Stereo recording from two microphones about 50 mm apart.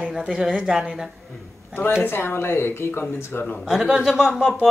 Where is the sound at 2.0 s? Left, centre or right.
Left.